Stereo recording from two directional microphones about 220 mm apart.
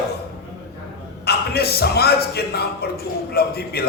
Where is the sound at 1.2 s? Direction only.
45° left (ahead or behind).